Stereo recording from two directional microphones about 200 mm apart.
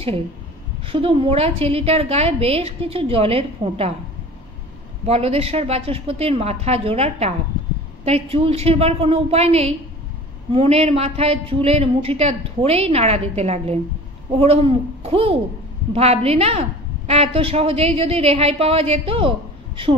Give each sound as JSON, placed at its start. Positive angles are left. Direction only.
{"t": 0.8, "sound": "a woman's voice", "side_deg": -25}
{"t": 5.0, "sound": "a woman's voice", "side_deg": -30}